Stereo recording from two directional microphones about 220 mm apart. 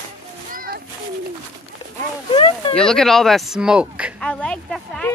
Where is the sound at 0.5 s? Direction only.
40° right (ahead or behind).